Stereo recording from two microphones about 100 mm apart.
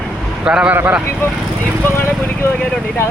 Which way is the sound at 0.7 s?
20° right (ahead or behind).